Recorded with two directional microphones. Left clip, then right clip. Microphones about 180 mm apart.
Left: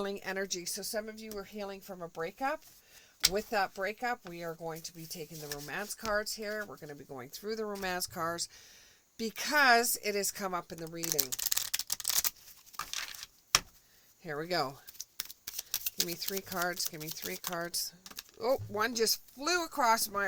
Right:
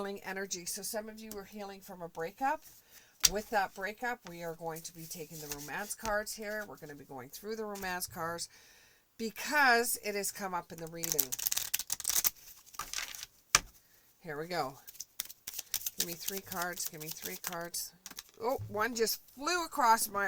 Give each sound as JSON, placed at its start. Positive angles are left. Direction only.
{"t": 0.0, "sound": "speech", "side_deg": 40}
{"t": 5.4, "sound": "speech", "side_deg": 20}
{"t": 5.6, "sound": "speech", "side_deg": 40}
{"t": 6.6, "sound": "speech", "side_deg": 30}
{"t": 11.0, "sound": "a sound", "side_deg": 10}
{"t": 14.3, "sound": "speech", "side_deg": 40}
{"t": 14.9, "sound": "a sound", "side_deg": 15}
{"t": 16.4, "sound": "speech", "side_deg": 50}